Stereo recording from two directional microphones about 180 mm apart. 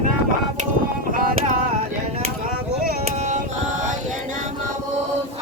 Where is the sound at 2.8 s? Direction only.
45° right (ahead or behind).